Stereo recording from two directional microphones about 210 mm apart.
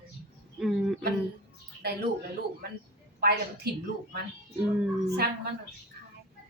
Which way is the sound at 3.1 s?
50° right (ahead or behind).